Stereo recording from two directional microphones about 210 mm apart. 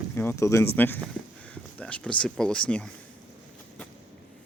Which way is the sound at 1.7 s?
5° left (ahead or behind).